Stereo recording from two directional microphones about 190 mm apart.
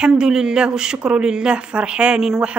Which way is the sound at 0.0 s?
5° right (ahead or behind).